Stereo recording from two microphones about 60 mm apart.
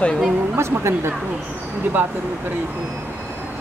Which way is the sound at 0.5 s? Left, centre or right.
Right.